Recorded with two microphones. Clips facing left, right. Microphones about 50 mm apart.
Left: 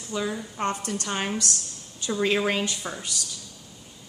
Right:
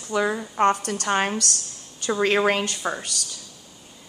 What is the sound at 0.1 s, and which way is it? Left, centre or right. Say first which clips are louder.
Speech: right 6 dB; right.